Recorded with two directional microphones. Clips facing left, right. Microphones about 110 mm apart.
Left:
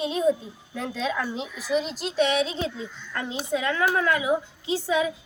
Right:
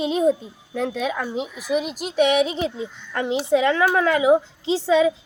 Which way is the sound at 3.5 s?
85° right.